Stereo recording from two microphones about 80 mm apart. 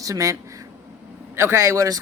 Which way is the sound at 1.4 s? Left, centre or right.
Right.